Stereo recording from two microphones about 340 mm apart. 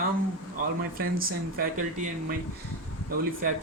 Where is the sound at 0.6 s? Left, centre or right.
Right.